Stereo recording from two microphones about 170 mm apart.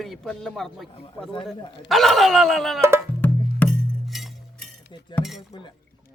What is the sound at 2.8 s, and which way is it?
Music, 15° right (ahead or behind).